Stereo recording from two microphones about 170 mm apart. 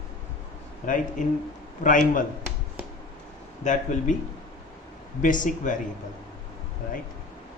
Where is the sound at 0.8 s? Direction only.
50° left (ahead or behind).